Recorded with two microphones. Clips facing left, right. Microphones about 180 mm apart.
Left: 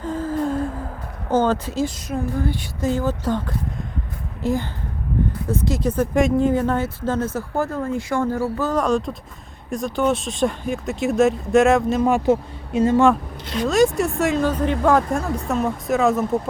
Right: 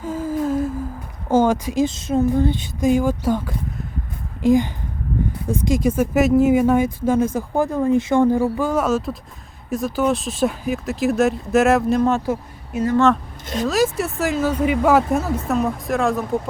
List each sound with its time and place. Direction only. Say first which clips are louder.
0.0 s humming: right 1 dB; 10° right (ahead or behind)
1.3 s speech: right 2 dB; 10° right (ahead or behind)
12.0 s speech: even; 15° left (ahead or behind)
12.3 s speech: left 5 dB; 25° left (ahead or behind)
13.7 s speech: left 3 dB; centre (ahead or behind)